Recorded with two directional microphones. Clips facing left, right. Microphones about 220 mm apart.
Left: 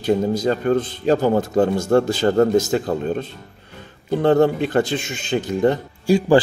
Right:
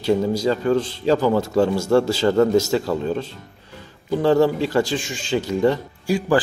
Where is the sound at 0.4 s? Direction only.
55° left (ahead or behind).